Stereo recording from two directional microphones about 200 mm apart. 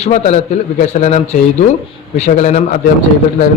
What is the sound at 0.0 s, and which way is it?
A man's voice, 35° left (ahead or behind).